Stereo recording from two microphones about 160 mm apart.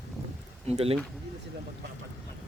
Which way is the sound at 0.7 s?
40° right (ahead or behind).